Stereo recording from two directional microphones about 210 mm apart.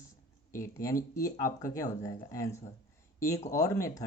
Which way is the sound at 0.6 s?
15° left (ahead or behind).